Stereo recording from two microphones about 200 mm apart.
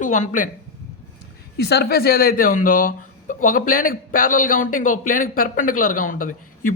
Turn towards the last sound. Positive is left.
turn(degrees=45)  # may be behind; listen again after turning